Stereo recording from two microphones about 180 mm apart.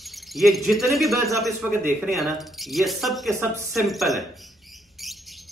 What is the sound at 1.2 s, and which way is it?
Speech, 15° right (ahead or behind).